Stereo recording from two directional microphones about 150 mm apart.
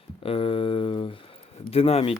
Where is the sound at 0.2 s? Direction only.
40° left (ahead or behind).